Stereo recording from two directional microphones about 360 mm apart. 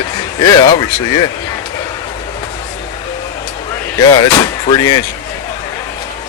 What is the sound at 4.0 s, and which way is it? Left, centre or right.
Speech, centre.